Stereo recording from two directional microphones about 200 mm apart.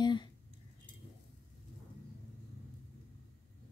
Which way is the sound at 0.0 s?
20° left (ahead or behind).